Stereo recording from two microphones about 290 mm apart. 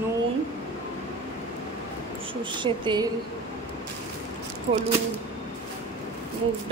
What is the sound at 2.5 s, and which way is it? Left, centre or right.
Speech, centre.